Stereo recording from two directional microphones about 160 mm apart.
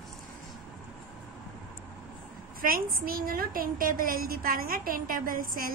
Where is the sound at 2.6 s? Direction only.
65° right (ahead or behind).